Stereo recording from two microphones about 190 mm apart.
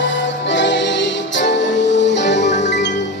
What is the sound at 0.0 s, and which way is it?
Music, 70° left (ahead or behind).